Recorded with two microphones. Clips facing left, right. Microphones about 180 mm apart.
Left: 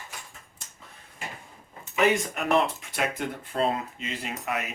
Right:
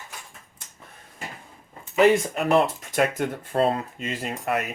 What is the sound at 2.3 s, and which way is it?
Speech, 35° right (ahead or behind).